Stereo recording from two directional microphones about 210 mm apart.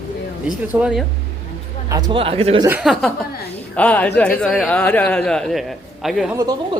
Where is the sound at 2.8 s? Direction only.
Centre (ahead or behind).